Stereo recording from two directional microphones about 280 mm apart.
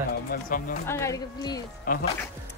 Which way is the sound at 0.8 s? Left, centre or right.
Centre.